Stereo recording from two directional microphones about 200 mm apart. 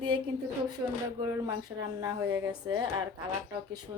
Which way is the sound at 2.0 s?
15° right (ahead or behind).